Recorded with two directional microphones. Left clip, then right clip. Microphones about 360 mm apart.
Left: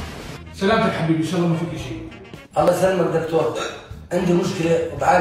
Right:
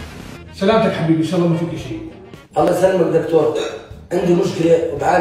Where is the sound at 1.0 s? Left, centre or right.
Centre.